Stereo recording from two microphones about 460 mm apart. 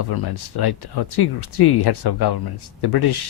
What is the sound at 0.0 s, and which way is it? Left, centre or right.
Speech, left.